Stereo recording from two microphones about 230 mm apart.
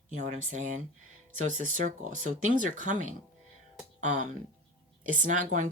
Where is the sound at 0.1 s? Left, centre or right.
Right.